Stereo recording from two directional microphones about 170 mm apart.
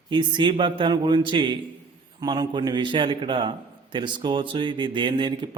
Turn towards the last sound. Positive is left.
turn(degrees=-30)  # may be behind; listen again after turning